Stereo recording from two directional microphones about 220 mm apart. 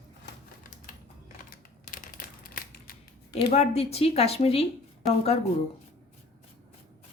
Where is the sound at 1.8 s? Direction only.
40° left (ahead or behind).